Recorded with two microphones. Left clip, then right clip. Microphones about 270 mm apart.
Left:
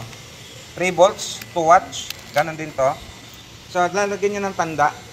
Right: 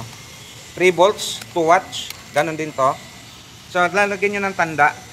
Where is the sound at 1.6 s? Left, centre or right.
Right.